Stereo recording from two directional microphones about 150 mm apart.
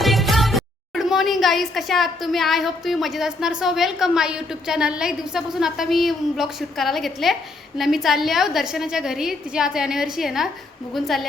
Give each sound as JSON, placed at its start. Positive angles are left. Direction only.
{"t": 0.0, "sound": "a woman's voice", "side_deg": 0}